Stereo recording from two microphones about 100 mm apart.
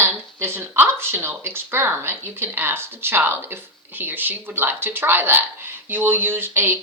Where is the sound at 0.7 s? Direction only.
25° right (ahead or behind).